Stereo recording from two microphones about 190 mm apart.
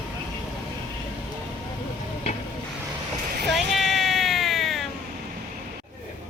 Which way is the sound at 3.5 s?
Centre (ahead or behind).